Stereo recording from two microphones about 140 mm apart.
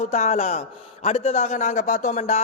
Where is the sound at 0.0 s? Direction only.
55° left (ahead or behind).